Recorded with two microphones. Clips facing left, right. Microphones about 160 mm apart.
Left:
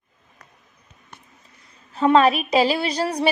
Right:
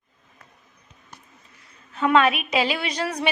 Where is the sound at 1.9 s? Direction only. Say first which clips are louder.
Left 3 dB; 35° left (ahead or behind).